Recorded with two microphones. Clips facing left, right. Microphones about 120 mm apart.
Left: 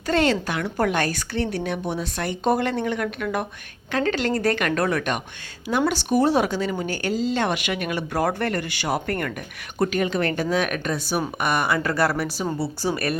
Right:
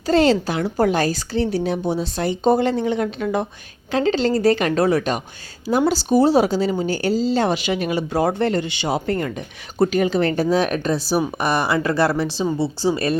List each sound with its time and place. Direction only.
0.1 s speech: 30° right (ahead or behind)